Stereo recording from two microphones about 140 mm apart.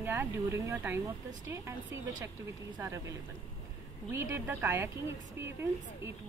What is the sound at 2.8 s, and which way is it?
A woman's voice, 20° right (ahead or behind).